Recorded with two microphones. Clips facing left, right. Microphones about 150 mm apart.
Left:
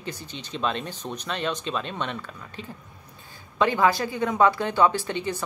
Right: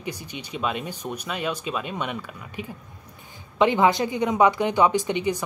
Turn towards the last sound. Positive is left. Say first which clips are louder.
# right 5 dB
turn(degrees=-15)  # may be behind; listen again after turning